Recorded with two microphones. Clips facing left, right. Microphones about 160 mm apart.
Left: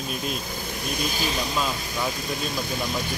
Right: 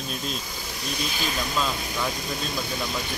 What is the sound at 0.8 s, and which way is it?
Speech, 55° left (ahead or behind).